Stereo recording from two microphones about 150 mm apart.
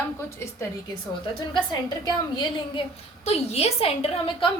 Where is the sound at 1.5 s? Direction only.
30° left (ahead or behind).